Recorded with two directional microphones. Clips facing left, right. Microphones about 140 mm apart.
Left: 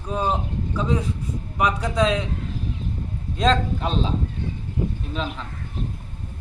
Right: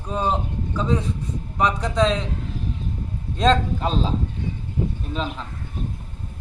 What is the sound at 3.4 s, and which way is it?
Speech, centre (ahead or behind).